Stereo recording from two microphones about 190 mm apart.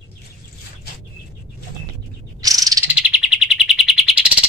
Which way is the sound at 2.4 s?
20° right (ahead or behind).